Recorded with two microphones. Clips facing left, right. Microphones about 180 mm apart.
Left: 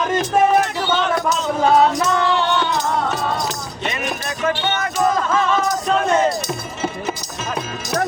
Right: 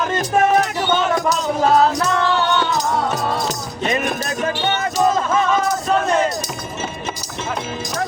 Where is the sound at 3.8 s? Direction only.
45° right (ahead or behind).